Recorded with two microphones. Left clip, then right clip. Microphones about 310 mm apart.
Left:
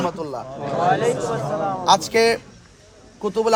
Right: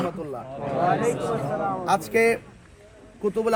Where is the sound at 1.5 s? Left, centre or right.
Left.